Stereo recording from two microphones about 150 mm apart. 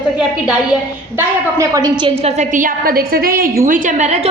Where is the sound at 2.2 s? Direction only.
50° right (ahead or behind); by 3.6 s 80° right.